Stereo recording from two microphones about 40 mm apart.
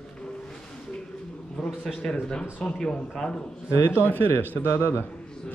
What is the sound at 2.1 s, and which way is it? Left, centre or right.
Speech, left.